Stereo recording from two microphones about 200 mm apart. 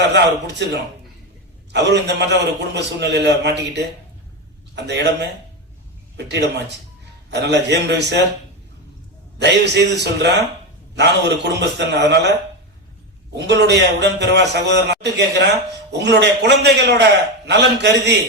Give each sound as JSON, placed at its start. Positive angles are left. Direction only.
{"t": 0.1, "sound": "a man's voice", "side_deg": -60}
{"t": 9.4, "sound": "a man's voice", "side_deg": -55}
{"t": 10.9, "sound": "a man's voice", "side_deg": -60}
{"t": 13.3, "sound": "a man's voice", "side_deg": -60}